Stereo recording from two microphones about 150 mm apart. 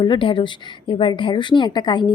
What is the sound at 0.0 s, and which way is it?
A woman's voice, 35° left (ahead or behind).